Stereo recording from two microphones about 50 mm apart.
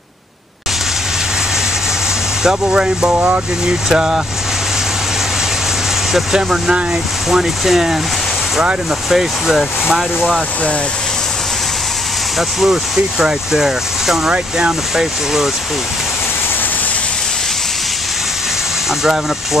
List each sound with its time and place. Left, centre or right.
2.4 s speech: centre
3.1 s speech: right
3.6 s speech: centre
6.1 s speech: centre
9.1 s speech: centre
12.4 s speech: centre